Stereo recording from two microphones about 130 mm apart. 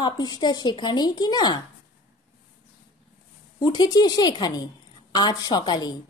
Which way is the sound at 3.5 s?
35° left (ahead or behind).